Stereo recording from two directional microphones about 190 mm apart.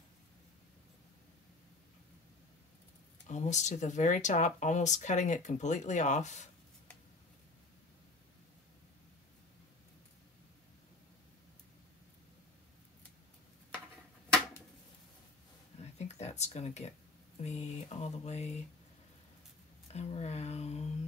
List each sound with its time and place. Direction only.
3.3 s speech: 40° left (ahead or behind)
15.8 s a sound: 35° left (ahead or behind)
17.4 s speech: 35° left (ahead or behind)
19.9 s speech: 35° left (ahead or behind)